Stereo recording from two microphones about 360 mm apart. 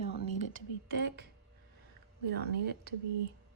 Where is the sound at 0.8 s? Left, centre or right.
Right.